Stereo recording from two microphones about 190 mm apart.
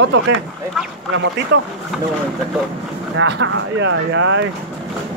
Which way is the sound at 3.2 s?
70° right (ahead or behind).